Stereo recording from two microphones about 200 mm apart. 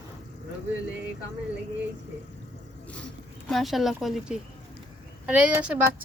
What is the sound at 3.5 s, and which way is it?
A woman's voice, centre (ahead or behind).